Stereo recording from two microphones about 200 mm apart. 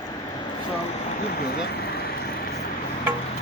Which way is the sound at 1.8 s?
50° left (ahead or behind).